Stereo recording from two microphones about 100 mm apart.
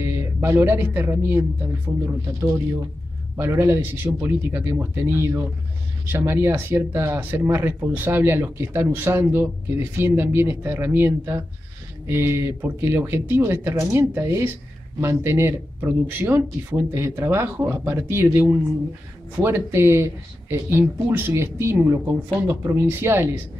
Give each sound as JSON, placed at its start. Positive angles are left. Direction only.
{"t": 0.0, "sound": "speech", "side_deg": -25}
{"t": 2.4, "sound": "speech", "side_deg": -20}
{"t": 19.4, "sound": "speech", "side_deg": -25}